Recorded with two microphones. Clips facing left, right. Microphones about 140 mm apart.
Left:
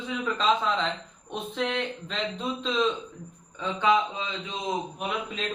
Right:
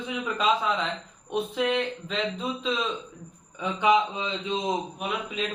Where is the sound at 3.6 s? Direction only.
15° right (ahead or behind).